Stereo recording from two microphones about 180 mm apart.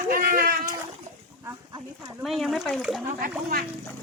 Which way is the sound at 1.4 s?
20° right (ahead or behind).